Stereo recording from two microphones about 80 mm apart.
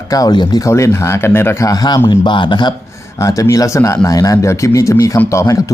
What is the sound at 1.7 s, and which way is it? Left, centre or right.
Speech, left.